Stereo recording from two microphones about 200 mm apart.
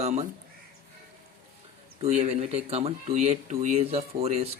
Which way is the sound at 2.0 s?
30° right (ahead or behind).